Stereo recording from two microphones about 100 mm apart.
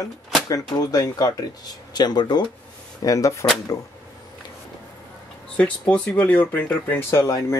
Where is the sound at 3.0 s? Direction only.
30° left (ahead or behind).